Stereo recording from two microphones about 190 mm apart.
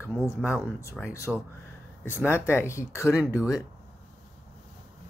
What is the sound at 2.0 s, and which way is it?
Speech, 10° left (ahead or behind).